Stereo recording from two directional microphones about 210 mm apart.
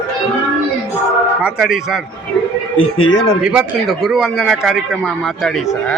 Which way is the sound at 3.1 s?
55° left (ahead or behind).